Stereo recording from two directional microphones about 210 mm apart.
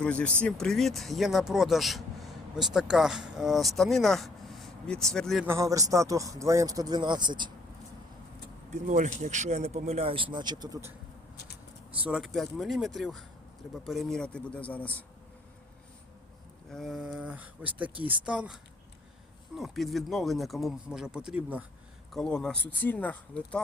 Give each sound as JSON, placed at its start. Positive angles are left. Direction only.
{"t": 0.0, "sound": "speech", "side_deg": 5}
{"t": 5.5, "sound": "a man's voice", "side_deg": -15}
{"t": 8.7, "sound": "speech", "side_deg": -35}
{"t": 12.0, "sound": "speech", "side_deg": 0}
{"t": 16.7, "sound": "speech", "side_deg": 0}